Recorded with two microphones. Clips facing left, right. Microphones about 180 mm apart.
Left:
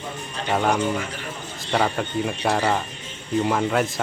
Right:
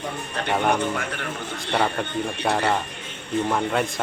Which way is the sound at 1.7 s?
Centre (ahead or behind).